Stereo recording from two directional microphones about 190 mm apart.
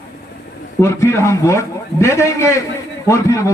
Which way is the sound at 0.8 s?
15° left (ahead or behind).